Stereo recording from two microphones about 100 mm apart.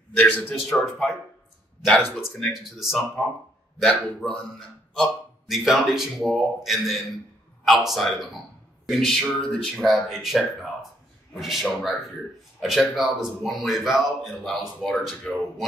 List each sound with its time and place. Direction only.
0.2 s a man's voice: 15° left (ahead or behind)
0.7 s a man's voice: 5° left (ahead or behind)
2.4 s a man's voice: centre (ahead or behind)
3.2 s a man's voice: 10° left (ahead or behind)
5.5 s a man's voice: centre (ahead or behind)